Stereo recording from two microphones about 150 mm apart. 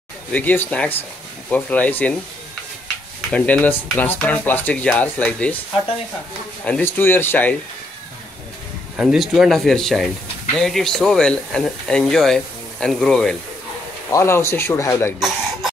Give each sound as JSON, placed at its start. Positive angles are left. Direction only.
{"t": 0.3, "sound": "speech", "side_deg": 10}
{"t": 3.3, "sound": "speech", "side_deg": 10}
{"t": 6.6, "sound": "speech", "side_deg": 10}
{"t": 8.9, "sound": "speech", "side_deg": -5}
{"t": 14.1, "sound": "speech", "side_deg": 20}
{"t": 15.1, "sound": "speech", "side_deg": 0}